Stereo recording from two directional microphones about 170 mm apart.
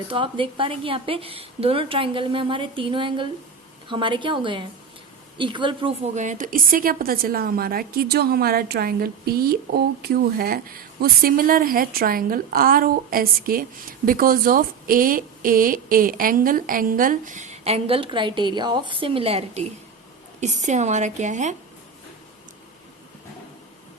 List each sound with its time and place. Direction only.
0.1 s a woman's voice: 30° right (ahead or behind)
6.1 s a woman's voice: 50° right (ahead or behind)